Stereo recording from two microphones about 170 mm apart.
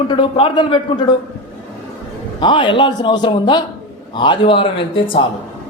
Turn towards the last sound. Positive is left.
turn(degrees=30)  # may be behind; listen again after turning